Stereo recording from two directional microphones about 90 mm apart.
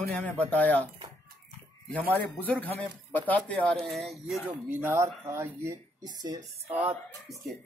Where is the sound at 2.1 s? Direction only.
20° left (ahead or behind).